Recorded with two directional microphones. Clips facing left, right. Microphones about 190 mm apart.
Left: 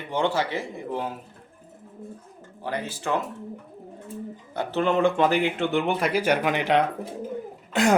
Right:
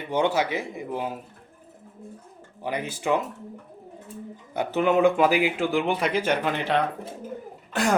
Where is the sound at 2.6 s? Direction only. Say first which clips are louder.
Right 1 dB; 15° right (ahead or behind).